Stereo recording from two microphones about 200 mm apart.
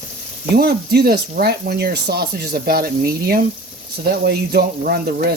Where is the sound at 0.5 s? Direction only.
50° right (ahead or behind).